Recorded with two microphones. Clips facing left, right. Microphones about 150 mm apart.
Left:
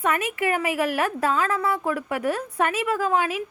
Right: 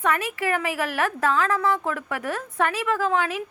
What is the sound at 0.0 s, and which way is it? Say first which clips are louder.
Speech: left 1 dB; 15° left (ahead or behind).